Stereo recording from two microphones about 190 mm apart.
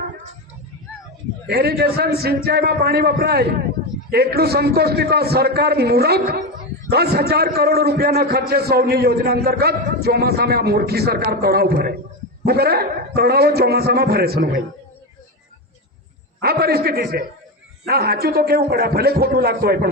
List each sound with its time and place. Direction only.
1.5 s a man's voice: 55° right (ahead or behind)
16.4 s a man's voice: 55° right (ahead or behind)